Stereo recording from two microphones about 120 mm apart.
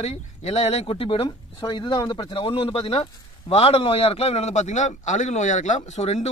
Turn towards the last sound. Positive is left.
turn(degrees=70)  # may be behind; listen again after turning